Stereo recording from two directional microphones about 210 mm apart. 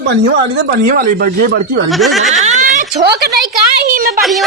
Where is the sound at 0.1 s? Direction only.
60° right (ahead or behind).